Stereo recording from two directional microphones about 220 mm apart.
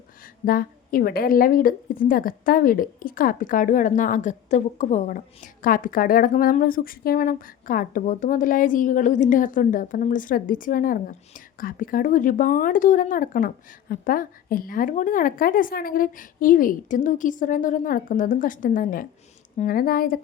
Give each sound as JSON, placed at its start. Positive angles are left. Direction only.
{"t": 0.4, "sound": "a woman's voice", "side_deg": 40}